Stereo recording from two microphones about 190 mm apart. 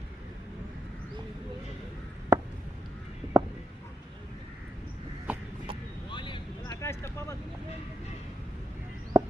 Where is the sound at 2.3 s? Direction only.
15° right (ahead or behind).